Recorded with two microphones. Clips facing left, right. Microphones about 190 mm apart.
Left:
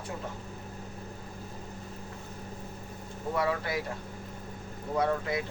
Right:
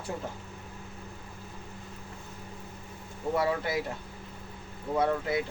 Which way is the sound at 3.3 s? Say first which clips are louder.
Right 1 dB; 25° right (ahead or behind).